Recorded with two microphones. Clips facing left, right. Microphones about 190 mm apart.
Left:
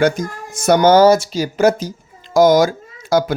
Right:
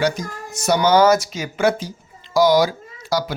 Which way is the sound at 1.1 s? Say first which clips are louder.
Left 4 dB; 30° left (ahead or behind).